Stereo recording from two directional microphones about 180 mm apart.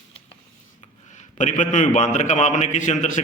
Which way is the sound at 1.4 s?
45° left (ahead or behind).